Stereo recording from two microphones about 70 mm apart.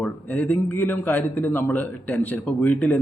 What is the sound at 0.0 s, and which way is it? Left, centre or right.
A man's voice, left.